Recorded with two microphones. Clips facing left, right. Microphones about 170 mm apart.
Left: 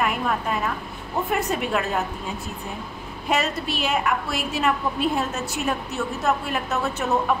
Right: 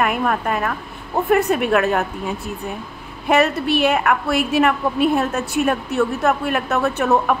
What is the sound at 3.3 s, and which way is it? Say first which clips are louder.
A woman's voice: right 8 dB; 60° right (ahead or behind).